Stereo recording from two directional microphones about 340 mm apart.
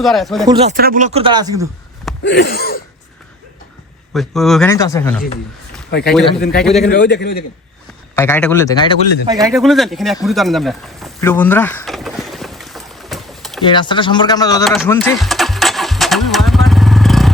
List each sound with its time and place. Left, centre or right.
0.0 s speech: centre
0.4 s speech: centre
2.2 s a sound: left
4.1 s speech: centre
6.4 s a man's voice: left
8.1 s speech: centre
9.2 s speech: centre
9.6 s speech: centre
10.2 s a sound: centre
13.7 s speech: centre
14.6 s a sound: centre